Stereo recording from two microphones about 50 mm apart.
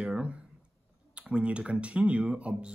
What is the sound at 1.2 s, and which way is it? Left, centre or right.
Speech, right.